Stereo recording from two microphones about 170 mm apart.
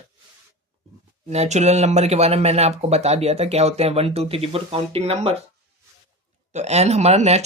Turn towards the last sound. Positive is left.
turn(degrees=-40)  # may be behind; listen again after turning